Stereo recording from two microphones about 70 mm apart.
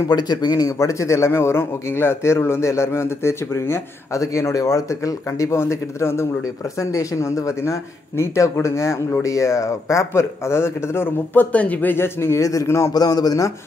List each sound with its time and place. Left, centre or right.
0.1 s speech: left
0.7 s a man's voice: left
6.4 s speech: left
12.9 s speech: left